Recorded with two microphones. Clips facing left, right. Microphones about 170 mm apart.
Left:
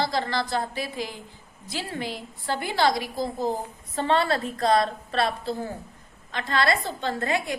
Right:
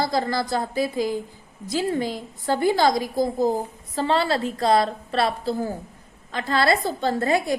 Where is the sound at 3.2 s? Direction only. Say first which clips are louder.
Right 6 dB; 40° right (ahead or behind).